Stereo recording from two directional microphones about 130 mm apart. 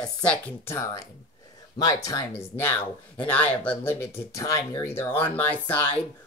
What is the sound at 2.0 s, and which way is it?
Speech, 20° left (ahead or behind).